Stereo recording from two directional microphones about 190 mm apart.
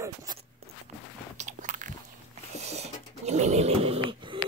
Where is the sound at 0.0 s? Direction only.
15° right (ahead or behind).